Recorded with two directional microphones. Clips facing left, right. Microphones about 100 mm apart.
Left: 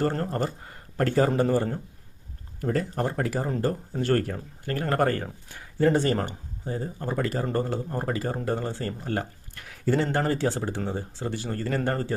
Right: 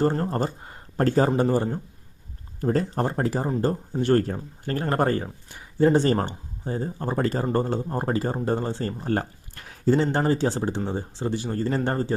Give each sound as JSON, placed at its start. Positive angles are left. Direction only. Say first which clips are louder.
{"t": 0.3, "sound": "speech", "louder": "right 2 dB", "side_deg": -25}
{"t": 1.4, "sound": "speech", "louder": "right 1 dB", "side_deg": -20}
{"t": 2.6, "sound": "speech", "louder": "right 3 dB", "side_deg": -30}